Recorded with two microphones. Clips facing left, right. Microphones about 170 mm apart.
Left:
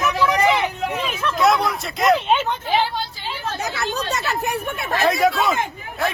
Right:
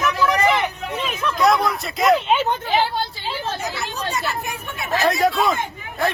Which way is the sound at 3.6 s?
75° left (ahead or behind).